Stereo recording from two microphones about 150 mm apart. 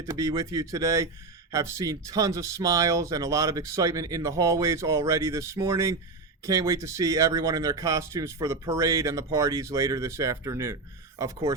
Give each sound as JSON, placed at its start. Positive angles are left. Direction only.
{"t": 0.1, "sound": "speech", "side_deg": -20}